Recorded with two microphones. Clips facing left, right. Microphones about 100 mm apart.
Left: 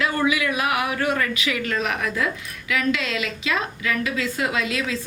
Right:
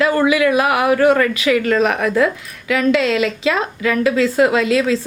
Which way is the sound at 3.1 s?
45° right (ahead or behind).